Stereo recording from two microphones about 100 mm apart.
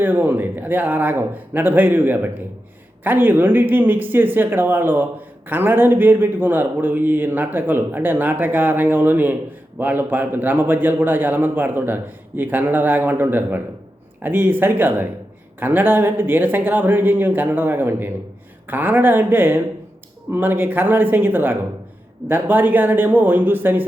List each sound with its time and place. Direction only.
0.0 s speech: 20° right (ahead or behind)